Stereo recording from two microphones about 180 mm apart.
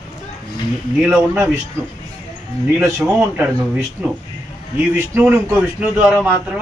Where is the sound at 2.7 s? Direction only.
10° right (ahead or behind).